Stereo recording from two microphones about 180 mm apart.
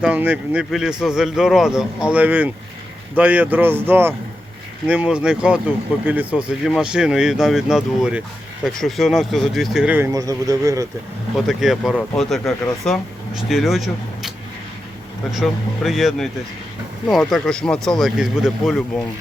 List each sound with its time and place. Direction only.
0.0 s speech: 5° right (ahead or behind)
11.4 s speech: centre (ahead or behind)